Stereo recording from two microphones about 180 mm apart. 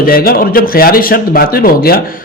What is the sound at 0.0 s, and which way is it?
A man's voice, 55° left (ahead or behind).